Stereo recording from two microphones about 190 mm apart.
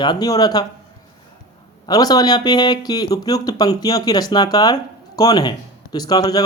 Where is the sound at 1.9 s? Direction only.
20° left (ahead or behind).